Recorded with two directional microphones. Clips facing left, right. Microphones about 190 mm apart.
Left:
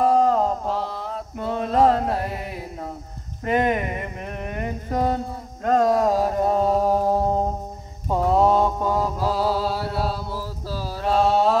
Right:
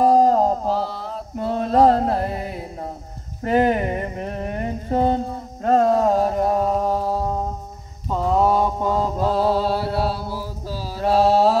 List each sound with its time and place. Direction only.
0.1 s a sound: 35° right (ahead or behind)
0.7 s mantra: centre (ahead or behind)
1.4 s mantra: 35° right (ahead or behind)
3.4 s a sound: 35° right (ahead or behind)
6.6 s a sound: centre (ahead or behind)
6.9 s mantra: 20° left (ahead or behind)
8.1 s mantra: 10° left (ahead or behind)
8.4 s mantra: 10° right (ahead or behind)
9.2 s mantra: 5° left (ahead or behind)